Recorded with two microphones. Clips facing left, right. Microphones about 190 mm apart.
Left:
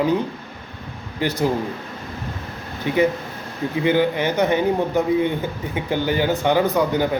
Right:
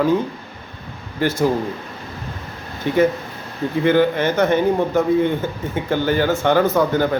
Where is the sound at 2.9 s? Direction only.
15° left (ahead or behind).